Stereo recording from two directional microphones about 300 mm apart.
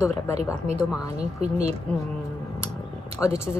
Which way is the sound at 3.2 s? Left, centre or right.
Centre.